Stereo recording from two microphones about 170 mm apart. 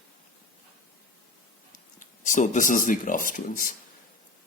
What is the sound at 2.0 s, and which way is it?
Speech, 50° left (ahead or behind).